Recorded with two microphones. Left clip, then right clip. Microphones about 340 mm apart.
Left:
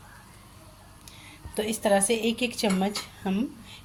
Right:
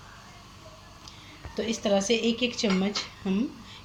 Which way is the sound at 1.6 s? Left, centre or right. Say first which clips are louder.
Left 2 dB; left.